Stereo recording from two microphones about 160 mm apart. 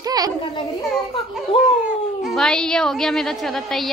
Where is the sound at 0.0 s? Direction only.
25° right (ahead or behind).